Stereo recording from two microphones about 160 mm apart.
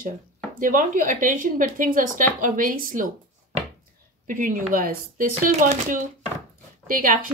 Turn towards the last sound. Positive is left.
turn(degrees=-60)  # may be behind; listen again after turning